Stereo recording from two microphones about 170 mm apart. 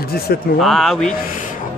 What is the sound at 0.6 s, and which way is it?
Speech, centre (ahead or behind).